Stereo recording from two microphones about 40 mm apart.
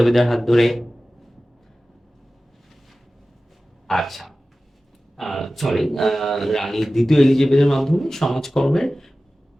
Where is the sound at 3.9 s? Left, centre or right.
Centre.